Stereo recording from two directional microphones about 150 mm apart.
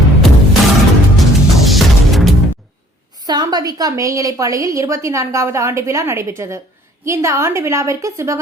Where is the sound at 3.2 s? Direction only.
25° right (ahead or behind).